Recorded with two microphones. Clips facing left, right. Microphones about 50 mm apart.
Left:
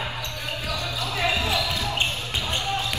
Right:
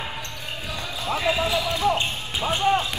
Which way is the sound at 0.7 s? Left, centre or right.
Right.